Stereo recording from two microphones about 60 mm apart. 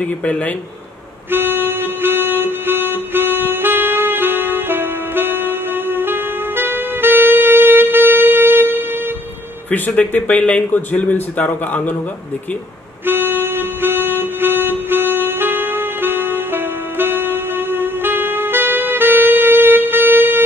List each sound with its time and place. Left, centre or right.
0.0 s a man's voice: left
1.3 s music: right
9.7 s a man's voice: left
13.0 s music: right